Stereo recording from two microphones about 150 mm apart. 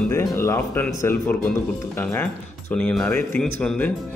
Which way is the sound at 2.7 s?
10° left (ahead or behind).